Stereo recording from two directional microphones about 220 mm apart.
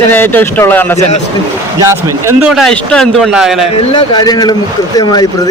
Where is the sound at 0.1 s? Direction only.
10° left (ahead or behind).